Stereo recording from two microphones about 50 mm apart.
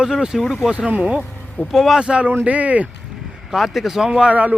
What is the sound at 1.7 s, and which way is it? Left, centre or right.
Speech, centre.